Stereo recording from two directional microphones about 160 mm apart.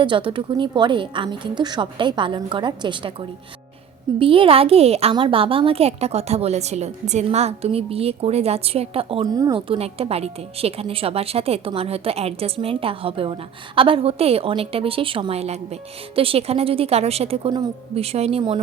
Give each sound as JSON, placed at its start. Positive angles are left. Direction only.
{"t": 0.0, "sound": "a woman's voice", "side_deg": -30}
{"t": 9.2, "sound": "a woman's voice", "side_deg": -25}